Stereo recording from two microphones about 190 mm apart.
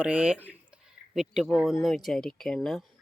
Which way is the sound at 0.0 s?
5° right (ahead or behind).